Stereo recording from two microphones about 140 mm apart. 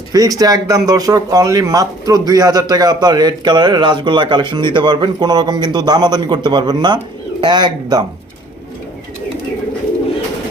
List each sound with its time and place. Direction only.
0.1 s speech: 25° right (ahead or behind)